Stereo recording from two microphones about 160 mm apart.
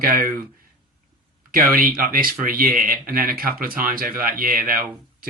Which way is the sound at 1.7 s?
60° right (ahead or behind).